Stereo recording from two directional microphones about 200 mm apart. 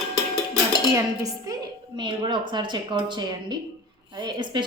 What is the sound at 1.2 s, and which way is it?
A woman's voice, 20° right (ahead or behind).